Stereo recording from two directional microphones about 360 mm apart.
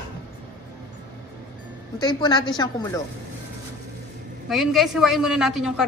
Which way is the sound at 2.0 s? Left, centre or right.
Centre.